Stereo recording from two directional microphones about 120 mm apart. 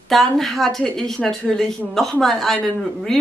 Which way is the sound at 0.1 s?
Centre (ahead or behind).